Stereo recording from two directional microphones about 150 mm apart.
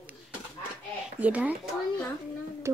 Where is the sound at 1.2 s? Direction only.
10° right (ahead or behind).